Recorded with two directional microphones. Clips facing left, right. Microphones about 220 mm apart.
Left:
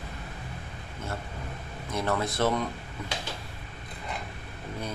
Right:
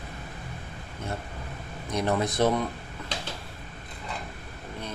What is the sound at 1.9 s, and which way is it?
Speech, 20° right (ahead or behind).